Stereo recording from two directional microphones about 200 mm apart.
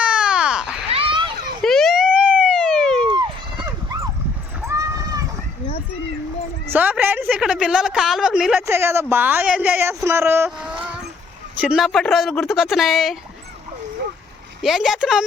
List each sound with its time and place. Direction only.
0.0 s baby cry: 5° right (ahead or behind)
0.9 s a sound: 30° right (ahead or behind)
1.6 s police car: centre (ahead or behind)
3.1 s clip-clop: 20° right (ahead or behind)
4.6 s a sound: 15° right (ahead or behind)
6.7 s a woman's voice: 10° right (ahead or behind)
14.6 s speech: centre (ahead or behind)